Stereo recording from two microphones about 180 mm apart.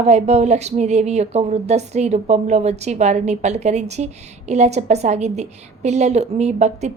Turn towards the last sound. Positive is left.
turn(degrees=-40)  # may be behind; listen again after turning